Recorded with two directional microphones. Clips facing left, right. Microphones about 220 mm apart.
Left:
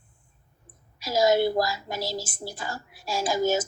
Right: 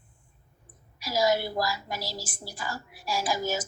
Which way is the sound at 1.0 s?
25° left (ahead or behind).